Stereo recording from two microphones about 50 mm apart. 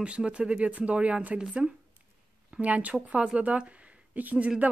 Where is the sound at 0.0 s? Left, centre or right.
Right.